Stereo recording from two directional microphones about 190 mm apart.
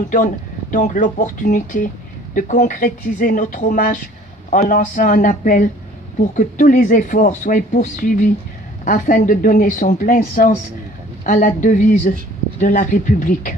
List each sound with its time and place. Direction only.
0.1 s speech: 40° left (ahead or behind)